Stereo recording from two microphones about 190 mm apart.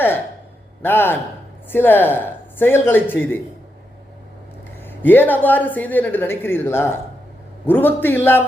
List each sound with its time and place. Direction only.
0.8 s a woman's voice: 10° left (ahead or behind)
4.9 s a woman's voice: 10° left (ahead or behind)